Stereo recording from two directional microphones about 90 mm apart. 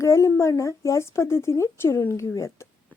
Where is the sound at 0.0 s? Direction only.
35° left (ahead or behind).